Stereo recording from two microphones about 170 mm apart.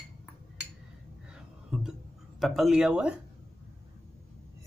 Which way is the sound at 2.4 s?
Centre (ahead or behind).